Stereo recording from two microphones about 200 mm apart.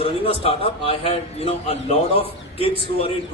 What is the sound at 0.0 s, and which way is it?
A man's voice, 30° left (ahead or behind).